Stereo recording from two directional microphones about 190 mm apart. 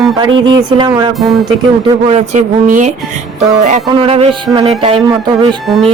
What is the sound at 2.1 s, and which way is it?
Speech, 40° right (ahead or behind).